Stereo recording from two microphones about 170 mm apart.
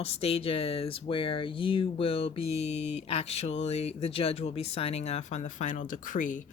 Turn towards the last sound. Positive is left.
turn(degrees=50)  # may be behind; listen again after turning